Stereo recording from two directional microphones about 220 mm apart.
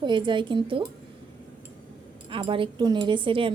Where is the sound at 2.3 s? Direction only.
25° right (ahead or behind).